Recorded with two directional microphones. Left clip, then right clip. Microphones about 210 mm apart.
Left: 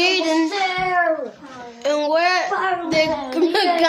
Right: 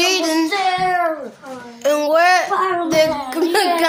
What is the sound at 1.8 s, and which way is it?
A woman's voice, 15° right (ahead or behind).